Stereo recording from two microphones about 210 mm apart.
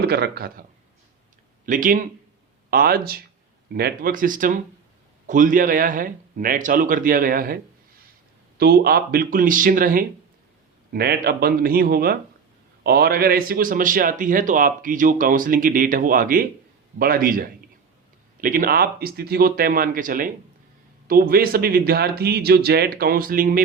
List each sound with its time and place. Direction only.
0.0 s speech: 50° right (ahead or behind)
1.6 s a man's voice: 40° right (ahead or behind)